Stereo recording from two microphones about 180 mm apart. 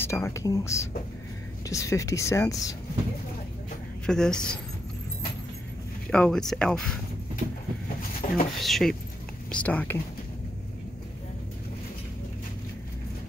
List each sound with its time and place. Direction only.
0.0 s speech: 15° left (ahead or behind)
4.0 s speech: 5° left (ahead or behind)
6.0 s speech: 5° left (ahead or behind)
8.2 s speech: 40° left (ahead or behind)
8.5 s speech: centre (ahead or behind)